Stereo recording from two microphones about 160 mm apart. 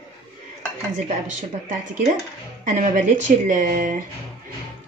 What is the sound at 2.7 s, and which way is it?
A woman's voice, 50° right (ahead or behind).